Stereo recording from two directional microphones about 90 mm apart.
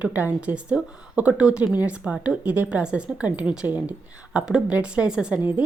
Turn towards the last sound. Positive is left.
turn(degrees=-10)  # may be behind; listen again after turning